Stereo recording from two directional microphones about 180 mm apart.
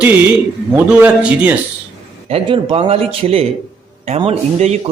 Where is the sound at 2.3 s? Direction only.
30° right (ahead or behind).